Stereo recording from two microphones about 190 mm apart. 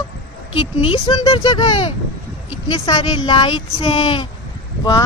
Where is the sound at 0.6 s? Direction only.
30° left (ahead or behind).